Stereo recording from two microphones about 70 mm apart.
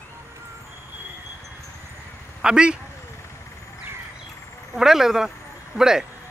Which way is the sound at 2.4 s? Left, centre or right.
Centre.